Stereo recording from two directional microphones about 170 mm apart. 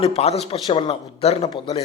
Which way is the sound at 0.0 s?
35° left (ahead or behind).